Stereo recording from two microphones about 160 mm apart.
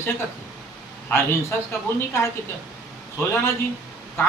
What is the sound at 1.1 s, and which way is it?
Speech, 15° left (ahead or behind).